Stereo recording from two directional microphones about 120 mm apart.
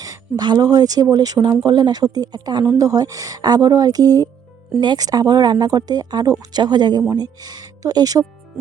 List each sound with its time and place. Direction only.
0.0 s speech: 30° right (ahead or behind)